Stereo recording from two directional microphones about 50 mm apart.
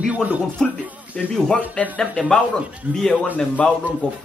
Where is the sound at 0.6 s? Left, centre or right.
Centre.